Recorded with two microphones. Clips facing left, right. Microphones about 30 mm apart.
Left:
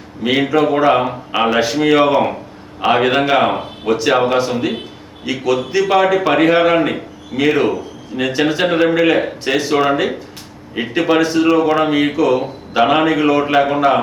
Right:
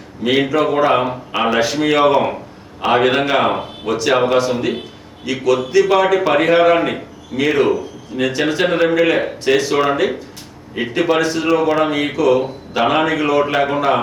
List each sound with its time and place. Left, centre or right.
0.3 s a man's voice: centre